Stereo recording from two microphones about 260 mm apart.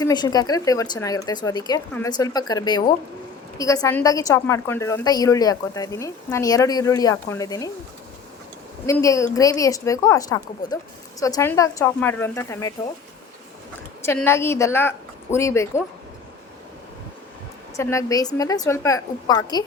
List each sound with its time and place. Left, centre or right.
0.0 s a woman's voice: centre
8.9 s a woman's voice: centre
14.0 s a woman's voice: centre
17.7 s a woman's voice: centre